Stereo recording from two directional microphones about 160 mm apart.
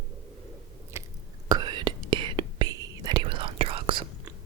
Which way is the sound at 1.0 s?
15° right (ahead or behind).